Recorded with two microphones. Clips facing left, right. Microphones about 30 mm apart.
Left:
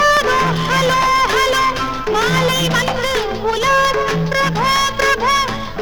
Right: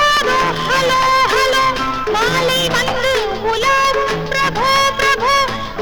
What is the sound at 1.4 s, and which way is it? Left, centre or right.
Music, right.